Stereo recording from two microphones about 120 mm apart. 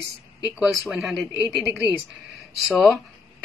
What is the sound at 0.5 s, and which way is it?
Speech, centre (ahead or behind).